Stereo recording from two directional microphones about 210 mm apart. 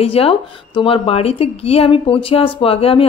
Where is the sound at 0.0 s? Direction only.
25° left (ahead or behind).